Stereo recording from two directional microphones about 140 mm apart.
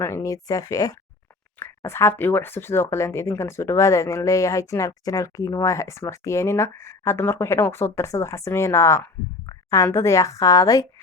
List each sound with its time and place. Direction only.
0.0 s speech: 20° left (ahead or behind)